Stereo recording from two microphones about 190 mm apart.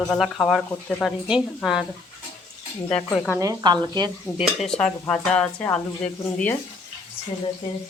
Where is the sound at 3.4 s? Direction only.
20° right (ahead or behind).